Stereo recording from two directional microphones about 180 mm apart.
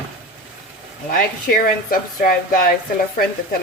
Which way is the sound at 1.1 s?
55° left (ahead or behind).